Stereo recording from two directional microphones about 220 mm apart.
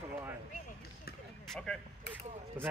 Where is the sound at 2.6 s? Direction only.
10° right (ahead or behind).